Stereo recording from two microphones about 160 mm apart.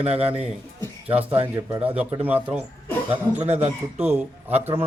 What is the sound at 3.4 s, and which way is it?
Speech, 40° right (ahead or behind).